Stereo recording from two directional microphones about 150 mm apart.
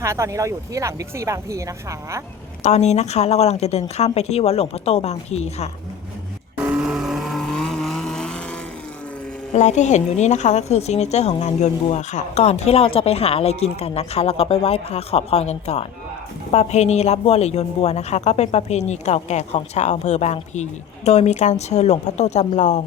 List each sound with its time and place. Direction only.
0.0 s speech: 20° right (ahead or behind)
2.6 s a woman's voice: 50° left (ahead or behind)
6.7 s vehicle: 5° right (ahead or behind)
9.5 s a woman's voice: 50° left (ahead or behind)